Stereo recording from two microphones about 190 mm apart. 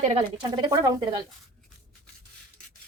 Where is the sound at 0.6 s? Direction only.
20° right (ahead or behind).